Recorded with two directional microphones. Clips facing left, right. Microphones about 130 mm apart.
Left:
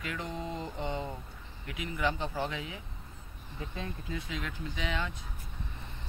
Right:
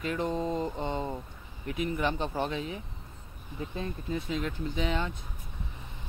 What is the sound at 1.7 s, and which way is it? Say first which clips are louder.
Speech: right 3 dB; 25° right (ahead or behind).